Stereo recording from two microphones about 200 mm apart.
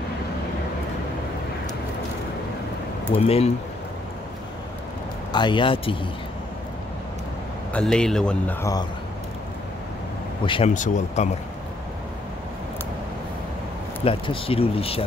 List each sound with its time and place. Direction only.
3.2 s speech: 30° left (ahead or behind)
5.3 s speech: 25° left (ahead or behind)
7.7 s speech: 5° left (ahead or behind)
10.4 s speech: 25° left (ahead or behind)
10.7 s speech: 35° left (ahead or behind)
14.0 s speech: 25° left (ahead or behind)